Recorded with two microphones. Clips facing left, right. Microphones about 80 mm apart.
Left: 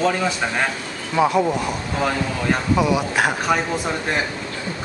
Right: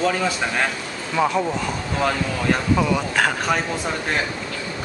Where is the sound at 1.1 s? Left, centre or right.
Centre.